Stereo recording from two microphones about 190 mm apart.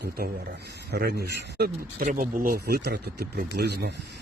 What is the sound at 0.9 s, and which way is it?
Speech, 60° right (ahead or behind).